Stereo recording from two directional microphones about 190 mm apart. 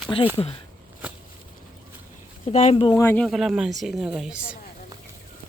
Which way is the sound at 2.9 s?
10° left (ahead or behind).